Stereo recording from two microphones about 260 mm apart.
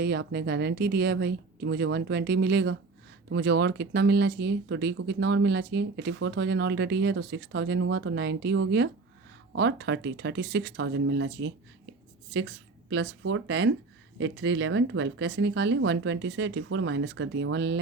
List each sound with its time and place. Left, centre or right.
0.0 s speech: right